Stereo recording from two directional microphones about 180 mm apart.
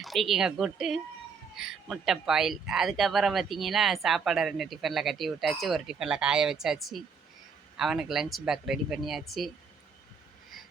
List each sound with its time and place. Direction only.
0.0 s speech: centre (ahead or behind)